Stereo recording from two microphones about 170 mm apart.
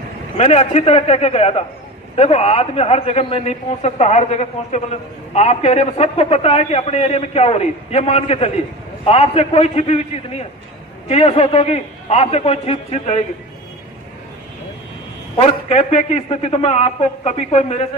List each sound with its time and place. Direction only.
0.4 s a man's voice: 40° left (ahead or behind)
15.3 s a man's voice: 40° left (ahead or behind)